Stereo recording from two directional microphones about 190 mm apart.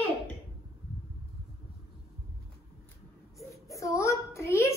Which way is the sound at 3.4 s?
15° left (ahead or behind).